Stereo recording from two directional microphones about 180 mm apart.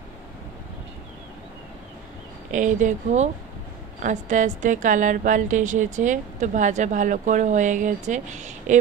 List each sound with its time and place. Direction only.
2.5 s a woman's voice: 45° right (ahead or behind)